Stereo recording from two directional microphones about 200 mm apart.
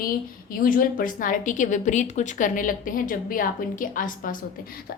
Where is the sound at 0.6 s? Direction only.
45° left (ahead or behind).